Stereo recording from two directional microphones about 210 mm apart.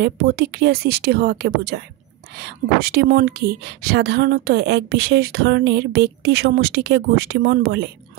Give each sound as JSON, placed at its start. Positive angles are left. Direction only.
{"t": 0.0, "sound": "speech", "side_deg": -50}